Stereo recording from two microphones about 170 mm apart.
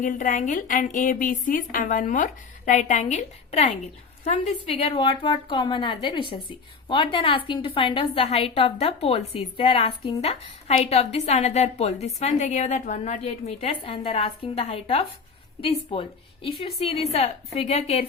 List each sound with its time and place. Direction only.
0.0 s a woman's voice: 50° left (ahead or behind)